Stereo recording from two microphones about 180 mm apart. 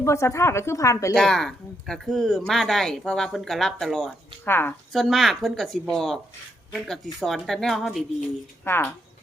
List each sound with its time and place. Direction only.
0.0 s a woman's voice: 15° left (ahead or behind)
1.1 s speech: 5° left (ahead or behind)
4.4 s a woman's voice: 10° left (ahead or behind)
4.9 s speech: centre (ahead or behind)
8.6 s a woman's voice: 10° left (ahead or behind)